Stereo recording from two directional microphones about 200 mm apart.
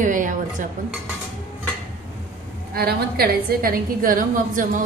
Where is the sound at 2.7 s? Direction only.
50° right (ahead or behind).